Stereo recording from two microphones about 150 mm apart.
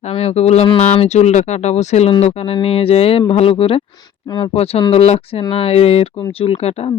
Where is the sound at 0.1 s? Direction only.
45° left (ahead or behind).